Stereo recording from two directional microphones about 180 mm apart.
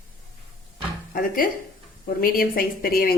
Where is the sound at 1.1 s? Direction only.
50° left (ahead or behind).